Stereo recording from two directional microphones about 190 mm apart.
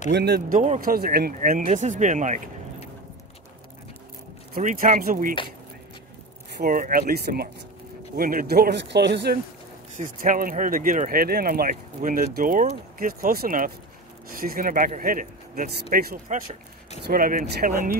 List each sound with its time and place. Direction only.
0.1 s speech: 60° right (ahead or behind)
0.6 s speech: 45° right (ahead or behind)
4.6 s speech: 45° right (ahead or behind)
6.6 s speech: 45° right (ahead or behind)
9.9 s speech: 45° right (ahead or behind)
15.7 s speech: 55° right (ahead or behind)